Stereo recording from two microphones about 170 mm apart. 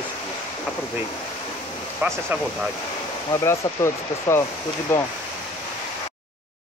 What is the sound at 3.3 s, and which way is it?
Speech, 15° left (ahead or behind).